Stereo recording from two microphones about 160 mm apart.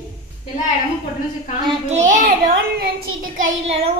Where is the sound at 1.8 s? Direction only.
50° right (ahead or behind).